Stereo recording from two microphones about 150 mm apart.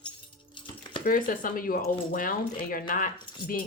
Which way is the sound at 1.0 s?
70° left (ahead or behind).